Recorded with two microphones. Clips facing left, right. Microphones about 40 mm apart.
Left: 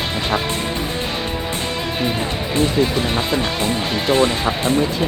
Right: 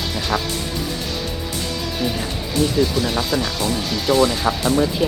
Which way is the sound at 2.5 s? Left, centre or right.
Left.